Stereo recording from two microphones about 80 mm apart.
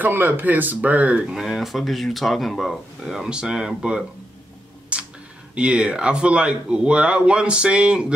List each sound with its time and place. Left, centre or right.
0.0 s speech: right
1.3 s speech: centre
4.9 s a sound: centre
5.5 s speech: centre